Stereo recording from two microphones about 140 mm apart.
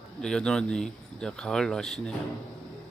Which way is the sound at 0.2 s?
5° left (ahead or behind).